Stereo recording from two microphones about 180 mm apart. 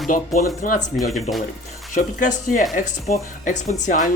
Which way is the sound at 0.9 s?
Centre (ahead or behind).